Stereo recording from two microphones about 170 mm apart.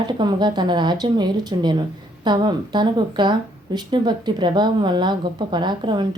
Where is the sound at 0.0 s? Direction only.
25° right (ahead or behind).